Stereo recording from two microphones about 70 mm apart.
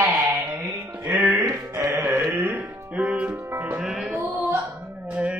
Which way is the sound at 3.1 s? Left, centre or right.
Centre.